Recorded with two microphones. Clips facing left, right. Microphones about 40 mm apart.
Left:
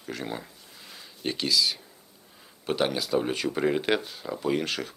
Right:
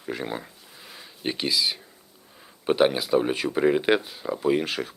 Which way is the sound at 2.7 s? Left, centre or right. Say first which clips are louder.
Right 5 dB; centre.